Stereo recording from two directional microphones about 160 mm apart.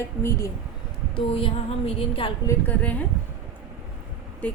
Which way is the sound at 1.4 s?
35° left (ahead or behind).